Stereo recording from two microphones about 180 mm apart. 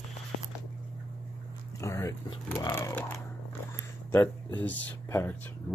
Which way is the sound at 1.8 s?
15° left (ahead or behind).